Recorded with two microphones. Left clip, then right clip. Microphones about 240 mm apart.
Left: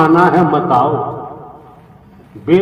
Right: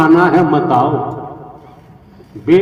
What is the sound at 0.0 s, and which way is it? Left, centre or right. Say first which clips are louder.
A man's voice: even; right.